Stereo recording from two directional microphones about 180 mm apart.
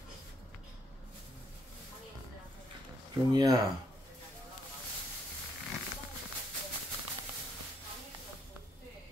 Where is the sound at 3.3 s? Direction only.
20° right (ahead or behind).